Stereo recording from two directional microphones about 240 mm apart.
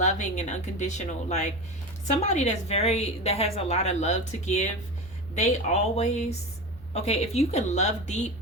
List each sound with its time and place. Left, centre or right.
0.0 s a woman's voice: left